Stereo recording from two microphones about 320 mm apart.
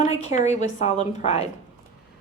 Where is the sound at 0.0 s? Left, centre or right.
Left.